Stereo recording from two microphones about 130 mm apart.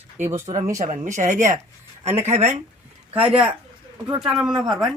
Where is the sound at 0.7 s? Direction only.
70° right (ahead or behind).